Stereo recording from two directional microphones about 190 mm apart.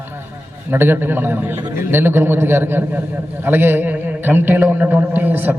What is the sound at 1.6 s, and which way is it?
Speech, 20° right (ahead or behind).